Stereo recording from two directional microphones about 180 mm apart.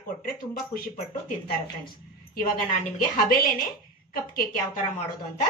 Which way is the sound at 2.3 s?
50° left (ahead or behind).